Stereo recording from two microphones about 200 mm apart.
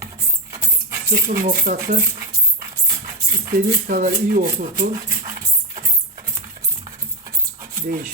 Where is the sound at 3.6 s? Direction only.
45° right (ahead or behind).